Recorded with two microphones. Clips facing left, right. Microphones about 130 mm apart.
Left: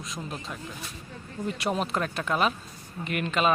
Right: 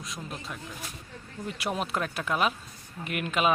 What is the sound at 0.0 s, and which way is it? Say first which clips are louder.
Speech: left 2 dB; centre (ahead or behind).